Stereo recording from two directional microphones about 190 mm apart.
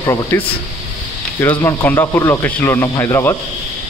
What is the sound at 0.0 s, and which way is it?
Speech, 20° left (ahead or behind).